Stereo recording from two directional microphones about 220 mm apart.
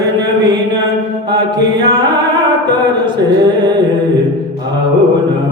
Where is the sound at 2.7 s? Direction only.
20° right (ahead or behind).